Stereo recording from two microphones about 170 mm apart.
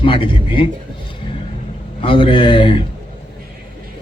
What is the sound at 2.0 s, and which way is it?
Speech, 30° left (ahead or behind).